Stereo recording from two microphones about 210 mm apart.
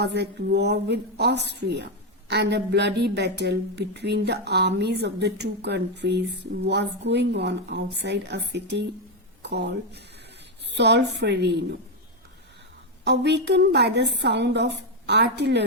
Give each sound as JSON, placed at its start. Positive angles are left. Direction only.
{"t": 0.0, "sound": "a woman's voice", "side_deg": -55}
{"t": 13.1, "sound": "a woman's voice", "side_deg": -55}